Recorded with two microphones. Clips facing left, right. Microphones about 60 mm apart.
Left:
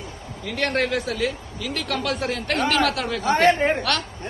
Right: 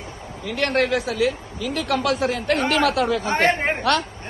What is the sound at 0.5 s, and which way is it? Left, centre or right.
Speech, centre.